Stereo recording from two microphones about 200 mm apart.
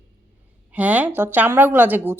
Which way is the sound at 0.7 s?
5° right (ahead or behind).